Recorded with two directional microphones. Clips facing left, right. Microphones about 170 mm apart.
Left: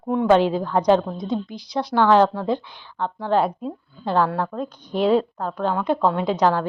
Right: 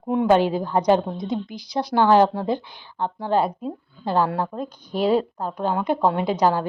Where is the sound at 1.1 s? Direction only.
40° left (ahead or behind).